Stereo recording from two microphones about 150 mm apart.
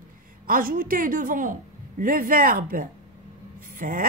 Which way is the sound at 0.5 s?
70° right (ahead or behind).